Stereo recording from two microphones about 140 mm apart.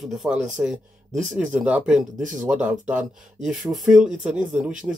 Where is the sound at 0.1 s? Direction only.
Centre (ahead or behind).